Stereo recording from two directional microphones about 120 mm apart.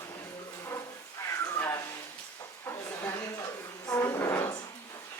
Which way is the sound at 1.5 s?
20° left (ahead or behind).